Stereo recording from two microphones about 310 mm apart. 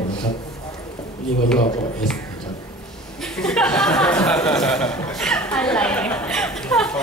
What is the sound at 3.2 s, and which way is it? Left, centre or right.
Speech, centre.